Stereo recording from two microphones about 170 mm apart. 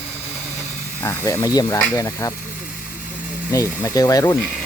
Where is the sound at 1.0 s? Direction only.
15° left (ahead or behind).